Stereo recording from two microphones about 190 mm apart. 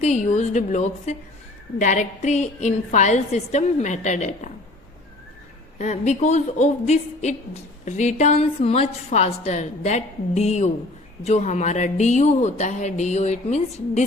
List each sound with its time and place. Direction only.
0.0 s a woman's voice: 40° left (ahead or behind)
5.8 s a woman's voice: 35° left (ahead or behind)